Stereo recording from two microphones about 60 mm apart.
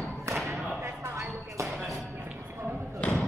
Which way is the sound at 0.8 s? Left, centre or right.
Right.